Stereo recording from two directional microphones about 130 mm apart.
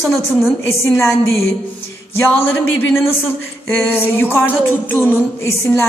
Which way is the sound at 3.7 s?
15° left (ahead or behind).